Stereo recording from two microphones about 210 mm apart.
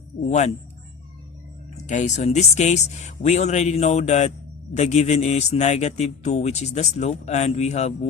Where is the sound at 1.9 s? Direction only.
35° left (ahead or behind).